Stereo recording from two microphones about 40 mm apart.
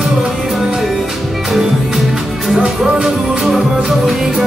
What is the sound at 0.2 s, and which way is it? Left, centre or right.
Music, centre.